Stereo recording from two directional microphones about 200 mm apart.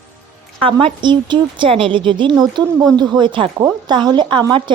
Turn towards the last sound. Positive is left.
turn(degrees=-20)  # may be behind; listen again after turning